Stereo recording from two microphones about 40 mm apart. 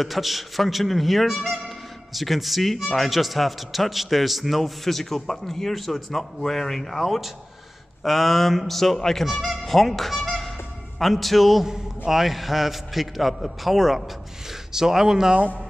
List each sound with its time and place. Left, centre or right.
0.0 s a man's voice: centre
9.4 s honk: centre
11.0 s a man's voice: centre